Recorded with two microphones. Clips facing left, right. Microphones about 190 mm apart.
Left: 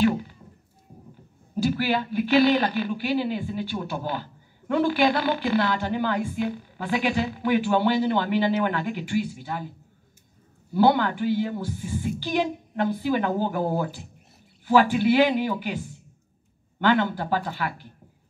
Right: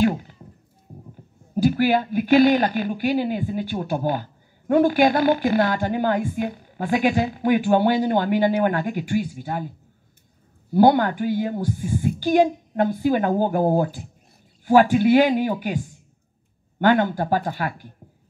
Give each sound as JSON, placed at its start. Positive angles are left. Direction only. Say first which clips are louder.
{"t": 1.5, "sound": "speech", "louder": "right 5 dB", "side_deg": -50}
{"t": 10.7, "sound": "speech", "louder": "right 4 dB", "side_deg": -45}
{"t": 16.8, "sound": "speech", "louder": "right 4 dB", "side_deg": -45}